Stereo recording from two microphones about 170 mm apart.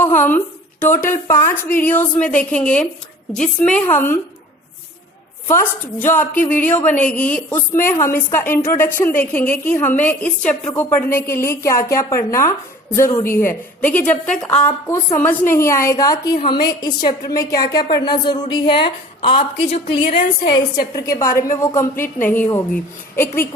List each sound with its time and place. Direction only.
0.0 s a woman's voice: 10° left (ahead or behind)
5.5 s a woman's voice: 15° left (ahead or behind)